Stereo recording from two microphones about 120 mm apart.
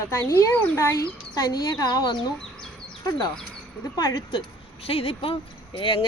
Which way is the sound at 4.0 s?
35° left (ahead or behind).